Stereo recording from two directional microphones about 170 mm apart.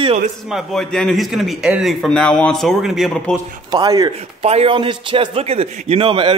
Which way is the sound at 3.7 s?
20° right (ahead or behind).